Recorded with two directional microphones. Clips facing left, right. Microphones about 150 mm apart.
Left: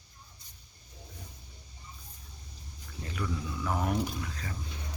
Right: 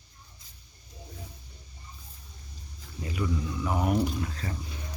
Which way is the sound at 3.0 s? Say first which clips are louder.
Right 5 dB; 10° right (ahead or behind).